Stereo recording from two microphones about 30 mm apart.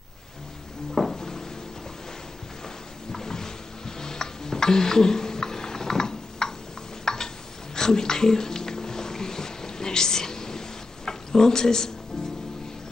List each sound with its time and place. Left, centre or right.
1.1 s cupboard open or close: centre
3.1 s music: centre
7.1 s a sound: centre
11.1 s speech: centre